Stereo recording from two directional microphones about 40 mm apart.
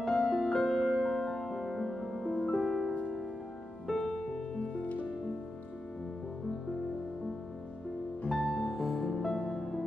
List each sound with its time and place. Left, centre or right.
0.2 s music: centre
4.2 s music: left
8.3 s music: centre